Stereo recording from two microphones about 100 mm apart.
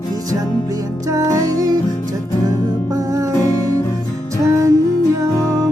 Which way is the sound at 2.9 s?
35° right (ahead or behind).